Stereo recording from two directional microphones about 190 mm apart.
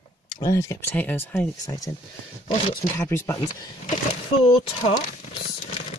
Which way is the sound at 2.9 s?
15° left (ahead or behind).